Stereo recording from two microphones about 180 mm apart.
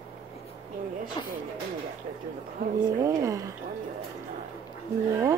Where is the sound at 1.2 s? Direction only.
25° left (ahead or behind).